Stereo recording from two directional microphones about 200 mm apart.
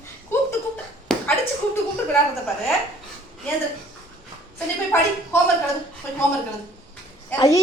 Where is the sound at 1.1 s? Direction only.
Centre (ahead or behind).